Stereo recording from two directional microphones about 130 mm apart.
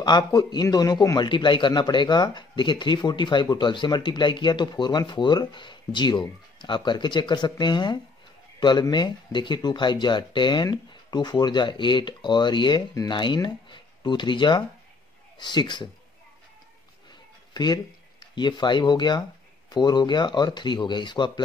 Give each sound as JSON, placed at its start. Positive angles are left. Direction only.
{"t": 0.0, "sound": "a man's voice", "side_deg": 30}
{"t": 17.1, "sound": "a sound", "side_deg": 35}
{"t": 18.3, "sound": "a man's voice", "side_deg": 35}